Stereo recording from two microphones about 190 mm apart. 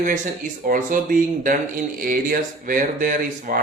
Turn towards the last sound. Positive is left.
turn(degrees=-50)  # may be behind; listen again after turning